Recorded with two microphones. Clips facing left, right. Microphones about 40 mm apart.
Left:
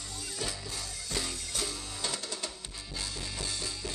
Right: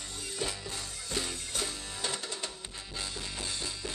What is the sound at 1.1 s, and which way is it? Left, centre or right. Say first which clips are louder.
Music: right 1 dB; right.